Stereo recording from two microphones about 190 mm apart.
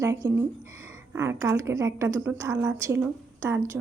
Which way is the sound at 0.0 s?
15° right (ahead or behind).